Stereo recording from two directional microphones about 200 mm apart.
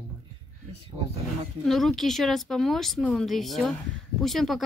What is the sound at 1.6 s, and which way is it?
Speech, centre (ahead or behind).